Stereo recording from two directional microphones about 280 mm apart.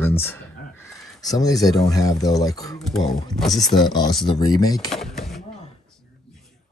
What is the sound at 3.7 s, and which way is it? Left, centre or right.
Speech, centre.